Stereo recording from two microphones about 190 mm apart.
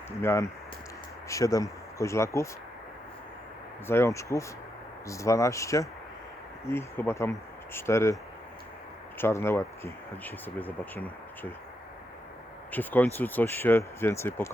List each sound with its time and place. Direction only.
0.2 s speech: 15° left (ahead or behind)
3.8 s speech: 15° left (ahead or behind)
9.1 s speech: 15° left (ahead or behind)
12.7 s speech: 10° left (ahead or behind)